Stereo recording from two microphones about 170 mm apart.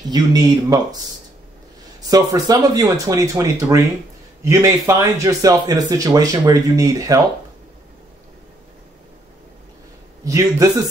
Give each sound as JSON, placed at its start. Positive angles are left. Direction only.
{"t": 0.1, "sound": "speech", "side_deg": -25}
{"t": 2.0, "sound": "speech", "side_deg": -20}
{"t": 10.2, "sound": "speech", "side_deg": -20}